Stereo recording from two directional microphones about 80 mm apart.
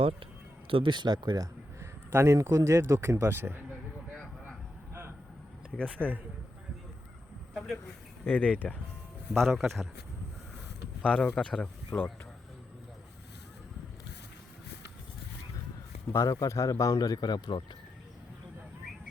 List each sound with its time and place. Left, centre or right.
0.7 s speech: right
1.8 s speech: right
6.0 s speech: centre
8.2 s speech: centre
9.3 s speech: centre
11.0 s speech: centre
16.1 s speech: left
17.0 s speech: left